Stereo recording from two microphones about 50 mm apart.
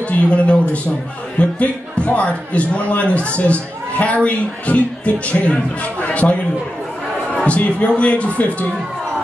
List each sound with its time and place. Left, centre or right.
0.1 s a man's voice: left